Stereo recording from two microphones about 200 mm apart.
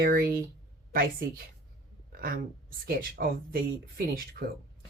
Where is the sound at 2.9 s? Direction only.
50° right (ahead or behind).